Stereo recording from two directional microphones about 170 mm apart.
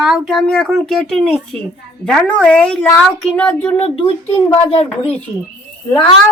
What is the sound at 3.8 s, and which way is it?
Speech, 30° left (ahead or behind).